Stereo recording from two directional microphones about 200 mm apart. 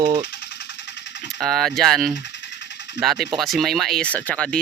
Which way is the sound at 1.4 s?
Centre (ahead or behind).